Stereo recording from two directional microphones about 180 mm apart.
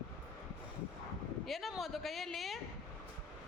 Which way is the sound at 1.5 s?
Centre (ahead or behind).